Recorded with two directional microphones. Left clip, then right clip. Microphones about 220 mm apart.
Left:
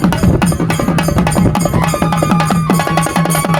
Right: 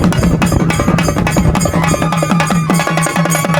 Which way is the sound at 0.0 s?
5° right (ahead or behind).